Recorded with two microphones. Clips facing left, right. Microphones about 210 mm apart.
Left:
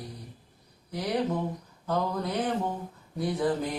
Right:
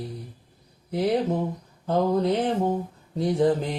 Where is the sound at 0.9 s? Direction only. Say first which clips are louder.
Right 6 dB; 25° right (ahead or behind).